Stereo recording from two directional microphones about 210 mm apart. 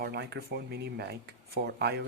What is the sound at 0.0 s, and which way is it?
Speech, 50° right (ahead or behind).